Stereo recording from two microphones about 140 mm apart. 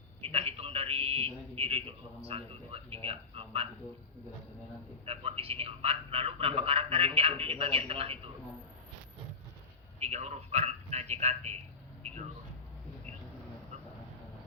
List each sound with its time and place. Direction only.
0.2 s a man's voice: 45° right (ahead or behind)
5.0 s a man's voice: 45° right (ahead or behind)
10.0 s a man's voice: 50° right (ahead or behind)